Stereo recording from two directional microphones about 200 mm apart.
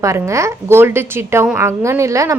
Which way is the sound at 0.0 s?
15° right (ahead or behind).